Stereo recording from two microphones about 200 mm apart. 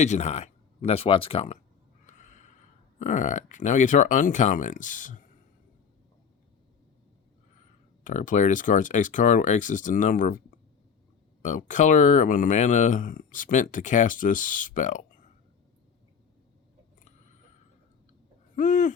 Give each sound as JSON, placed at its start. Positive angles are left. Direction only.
{"t": 0.0, "sound": "speech", "side_deg": 35}
{"t": 2.0, "sound": "a sound", "side_deg": 40}
{"t": 3.0, "sound": "speech", "side_deg": 35}
{"t": 8.0, "sound": "speech", "side_deg": 40}
{"t": 11.4, "sound": "speech", "side_deg": 40}
{"t": 18.5, "sound": "owl", "side_deg": 40}